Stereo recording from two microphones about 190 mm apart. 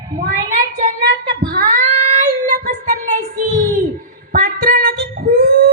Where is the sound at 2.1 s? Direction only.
45° right (ahead or behind).